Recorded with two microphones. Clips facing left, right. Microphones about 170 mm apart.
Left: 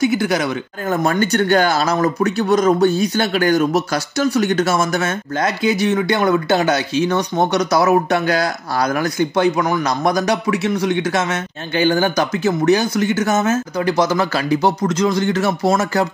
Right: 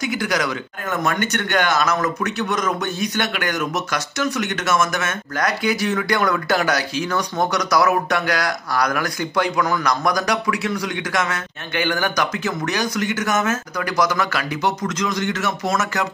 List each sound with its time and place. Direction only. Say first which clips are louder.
0.0 s speech: left 5 dB; 25° left (ahead or behind)